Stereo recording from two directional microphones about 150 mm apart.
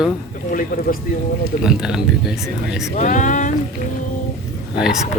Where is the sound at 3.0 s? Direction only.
55° left (ahead or behind).